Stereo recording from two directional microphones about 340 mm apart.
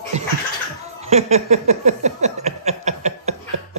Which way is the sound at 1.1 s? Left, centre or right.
Centre.